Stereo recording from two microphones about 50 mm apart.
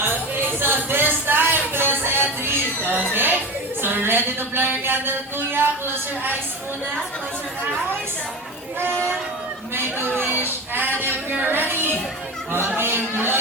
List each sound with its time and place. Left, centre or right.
0.0 s music: right
2.4 s a sound: right
3.8 s speech: right
9.7 s speech: right
11.0 s a sound: right
11.7 s speech: right